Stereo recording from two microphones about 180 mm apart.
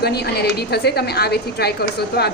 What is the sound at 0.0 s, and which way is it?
A woman's voice, 60° left (ahead or behind).